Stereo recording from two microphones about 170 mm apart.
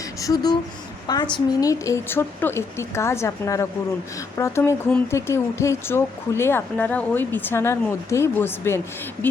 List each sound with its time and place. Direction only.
0.2 s speech: 20° left (ahead or behind)